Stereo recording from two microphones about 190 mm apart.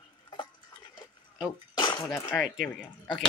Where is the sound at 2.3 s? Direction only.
5° left (ahead or behind).